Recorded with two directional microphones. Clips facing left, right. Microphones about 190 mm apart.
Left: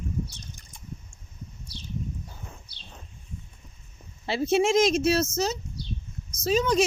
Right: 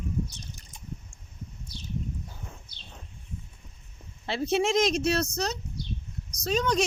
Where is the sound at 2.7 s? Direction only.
50° right (ahead or behind).